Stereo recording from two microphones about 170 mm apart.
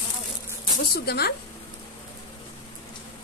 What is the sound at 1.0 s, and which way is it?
Speech, 70° left (ahead or behind).